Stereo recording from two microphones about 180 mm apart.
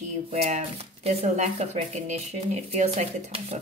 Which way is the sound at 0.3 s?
40° right (ahead or behind).